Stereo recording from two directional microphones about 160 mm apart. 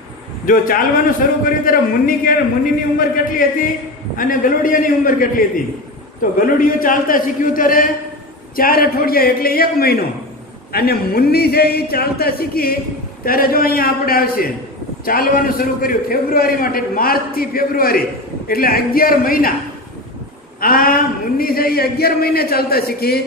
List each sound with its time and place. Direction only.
0.5 s a man's voice: 60° left (ahead or behind)
6.4 s a man's voice: 60° left (ahead or behind)
20.6 s a man's voice: 65° left (ahead or behind)